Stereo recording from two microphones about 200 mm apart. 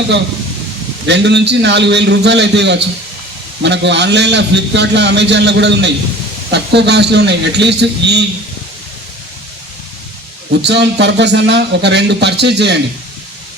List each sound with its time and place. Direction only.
1.0 s a man's voice: 60° right (ahead or behind)
10.5 s a man's voice: 60° right (ahead or behind)